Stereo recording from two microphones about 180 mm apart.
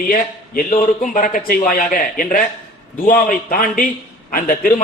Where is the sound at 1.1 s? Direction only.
50° left (ahead or behind).